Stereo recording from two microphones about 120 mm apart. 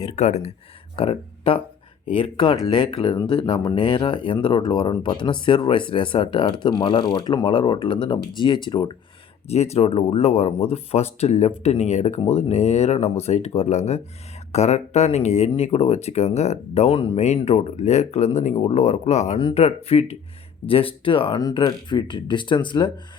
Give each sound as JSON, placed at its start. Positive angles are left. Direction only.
{"t": 0.2, "sound": "speech", "side_deg": 65}
{"t": 0.9, "sound": "speech", "side_deg": 50}
{"t": 3.2, "sound": "speech", "side_deg": 40}
{"t": 9.5, "sound": "speech", "side_deg": 65}
{"t": 19.5, "sound": "speech", "side_deg": 60}